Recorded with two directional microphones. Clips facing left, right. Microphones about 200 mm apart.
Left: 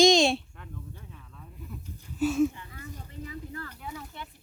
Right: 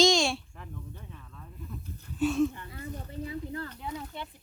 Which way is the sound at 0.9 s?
5° left (ahead or behind).